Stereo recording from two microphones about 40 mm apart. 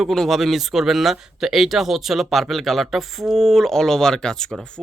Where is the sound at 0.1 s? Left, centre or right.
Centre.